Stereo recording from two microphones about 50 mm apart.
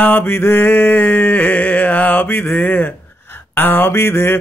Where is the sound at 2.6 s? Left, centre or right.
Left.